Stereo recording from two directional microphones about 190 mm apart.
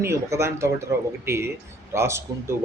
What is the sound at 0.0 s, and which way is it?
Speech, 15° right (ahead or behind).